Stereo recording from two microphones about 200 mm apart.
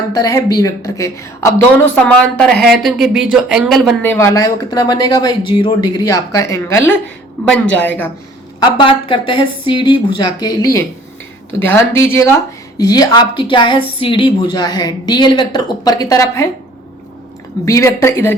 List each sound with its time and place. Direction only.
0.1 s a woman's voice: 15° left (ahead or behind)
8.8 s speech: 25° left (ahead or behind)
17.7 s a woman's voice: 15° left (ahead or behind)